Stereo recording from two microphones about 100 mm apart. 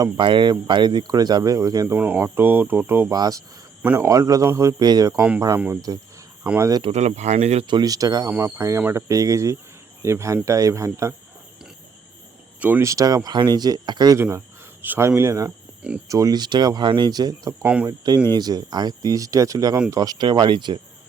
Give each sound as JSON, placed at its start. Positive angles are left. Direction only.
{"t": 0.2, "sound": "speech", "side_deg": -55}
{"t": 1.9, "sound": "speech", "side_deg": -20}
{"t": 3.1, "sound": "speech", "side_deg": -40}
{"t": 4.8, "sound": "speech", "side_deg": -40}
{"t": 5.5, "sound": "speech", "side_deg": -20}
{"t": 6.6, "sound": "speech", "side_deg": -35}
{"t": 6.8, "sound": "speech", "side_deg": -80}
{"t": 7.7, "sound": "speech", "side_deg": -40}
{"t": 8.3, "sound": "speech", "side_deg": -25}
{"t": 12.5, "sound": "cricket", "side_deg": -15}
{"t": 12.8, "sound": "speech", "side_deg": -35}
{"t": 14.2, "sound": "speech", "side_deg": -25}